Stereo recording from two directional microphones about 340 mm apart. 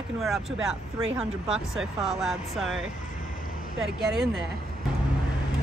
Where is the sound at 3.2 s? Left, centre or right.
Left.